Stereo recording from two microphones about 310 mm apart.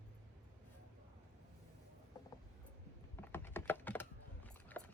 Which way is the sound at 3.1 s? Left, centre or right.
Centre.